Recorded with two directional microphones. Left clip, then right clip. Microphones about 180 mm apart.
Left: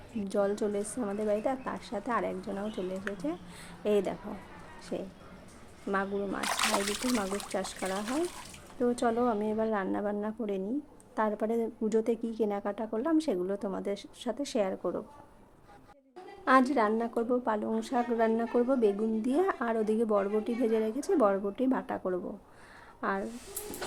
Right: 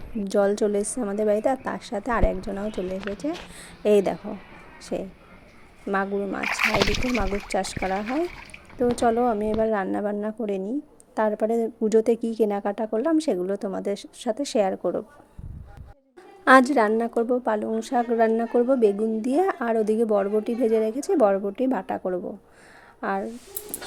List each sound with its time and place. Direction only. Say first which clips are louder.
0.3 s a woman's voice: right 8 dB; 35° right (ahead or behind)
16.4 s a woman's voice: right 9 dB; 45° right (ahead or behind); by 23.3 s 30° right (ahead or behind)